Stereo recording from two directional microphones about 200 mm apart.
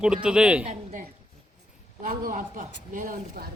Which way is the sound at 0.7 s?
40° right (ahead or behind).